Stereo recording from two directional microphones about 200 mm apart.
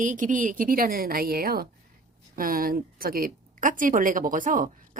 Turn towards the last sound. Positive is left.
turn(degrees=-40)  # may be behind; listen again after turning